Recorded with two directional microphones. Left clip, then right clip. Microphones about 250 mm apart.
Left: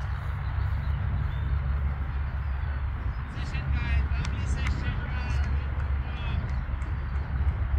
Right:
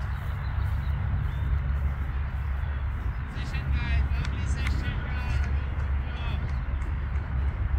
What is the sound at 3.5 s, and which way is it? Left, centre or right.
Vehicle, centre.